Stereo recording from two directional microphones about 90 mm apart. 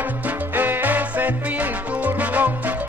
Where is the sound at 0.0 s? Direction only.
20° right (ahead or behind).